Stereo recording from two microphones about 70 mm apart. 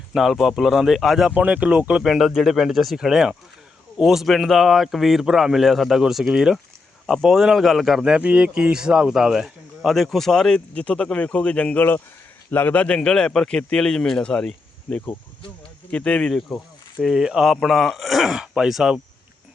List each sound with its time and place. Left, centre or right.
0.1 s speech: centre
1.3 s speech: centre
2.0 s speech: centre
16.5 s speech: centre